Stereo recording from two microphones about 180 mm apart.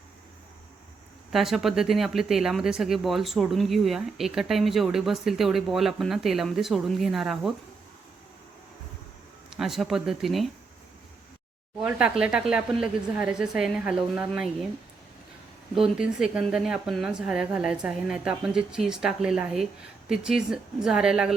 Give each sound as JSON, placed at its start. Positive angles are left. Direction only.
{"t": 1.3, "sound": "speech", "side_deg": 0}
{"t": 9.5, "sound": "speech", "side_deg": 0}
{"t": 11.8, "sound": "speech", "side_deg": -5}
{"t": 15.7, "sound": "speech", "side_deg": -5}